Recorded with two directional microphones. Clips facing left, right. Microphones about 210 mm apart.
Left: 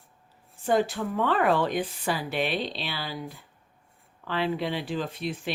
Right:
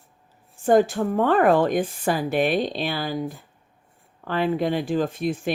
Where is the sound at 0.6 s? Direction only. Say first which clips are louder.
Right 7 dB; 45° right (ahead or behind).